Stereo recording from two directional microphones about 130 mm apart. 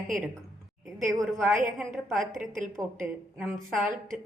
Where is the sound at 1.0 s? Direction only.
Centre (ahead or behind).